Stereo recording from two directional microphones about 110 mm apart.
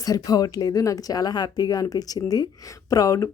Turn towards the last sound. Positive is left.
turn(degrees=30)  # may be behind; listen again after turning